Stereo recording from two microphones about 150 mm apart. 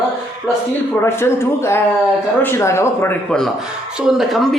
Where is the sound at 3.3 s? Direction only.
5° left (ahead or behind).